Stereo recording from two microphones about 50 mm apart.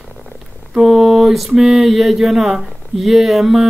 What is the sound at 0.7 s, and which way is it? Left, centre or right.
Mantra, centre.